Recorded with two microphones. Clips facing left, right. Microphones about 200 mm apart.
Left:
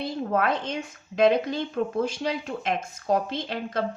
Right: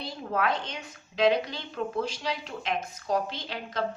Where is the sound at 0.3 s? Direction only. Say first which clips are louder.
Left 2 dB; 50° left (ahead or behind).